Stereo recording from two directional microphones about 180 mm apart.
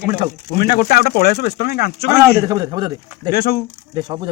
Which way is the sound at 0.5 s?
60° left (ahead or behind).